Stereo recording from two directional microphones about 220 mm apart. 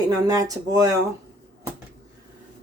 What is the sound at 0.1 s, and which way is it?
Speech, 15° right (ahead or behind).